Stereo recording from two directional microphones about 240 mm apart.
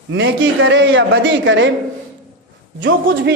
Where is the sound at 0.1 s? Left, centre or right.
Right.